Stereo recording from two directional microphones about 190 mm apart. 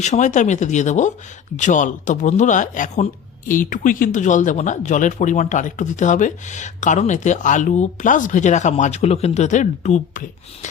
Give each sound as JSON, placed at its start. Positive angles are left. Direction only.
{"t": 0.0, "sound": "speech", "side_deg": 40}